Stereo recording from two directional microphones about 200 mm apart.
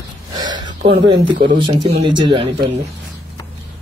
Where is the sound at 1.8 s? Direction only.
20° right (ahead or behind).